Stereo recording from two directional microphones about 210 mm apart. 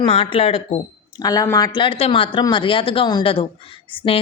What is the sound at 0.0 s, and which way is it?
Speech, 25° left (ahead or behind).